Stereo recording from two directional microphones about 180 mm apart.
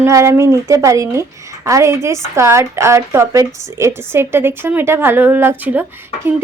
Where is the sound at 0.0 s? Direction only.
15° right (ahead or behind).